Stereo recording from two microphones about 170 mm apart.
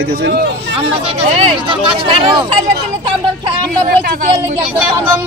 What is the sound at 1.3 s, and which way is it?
Speech, 30° right (ahead or behind).